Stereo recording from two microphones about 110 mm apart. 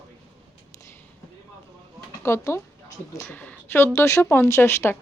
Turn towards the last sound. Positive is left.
turn(degrees=20)  # may be behind; listen again after turning